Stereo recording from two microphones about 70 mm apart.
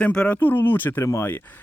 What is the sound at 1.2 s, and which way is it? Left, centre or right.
Speech, left.